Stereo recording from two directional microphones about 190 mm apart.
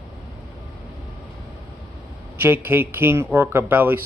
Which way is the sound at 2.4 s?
10° right (ahead or behind).